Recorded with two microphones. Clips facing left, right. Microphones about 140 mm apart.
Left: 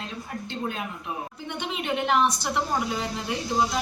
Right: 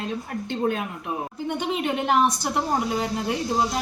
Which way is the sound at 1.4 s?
45° right (ahead or behind).